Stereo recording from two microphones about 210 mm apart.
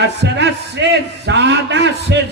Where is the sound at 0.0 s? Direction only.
55° right (ahead or behind).